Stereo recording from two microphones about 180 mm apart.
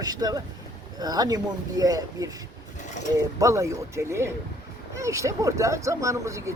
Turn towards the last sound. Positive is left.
turn(degrees=-15)  # may be behind; listen again after turning